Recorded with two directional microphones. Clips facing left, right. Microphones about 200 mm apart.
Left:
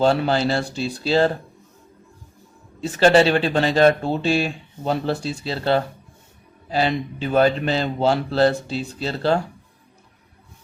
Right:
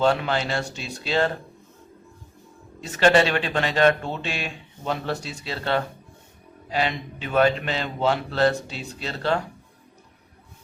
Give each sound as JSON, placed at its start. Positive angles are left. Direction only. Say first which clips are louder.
{"t": 0.0, "sound": "speech", "louder": "left 4 dB", "side_deg": 35}
{"t": 2.8, "sound": "speech", "louder": "left 4 dB", "side_deg": 30}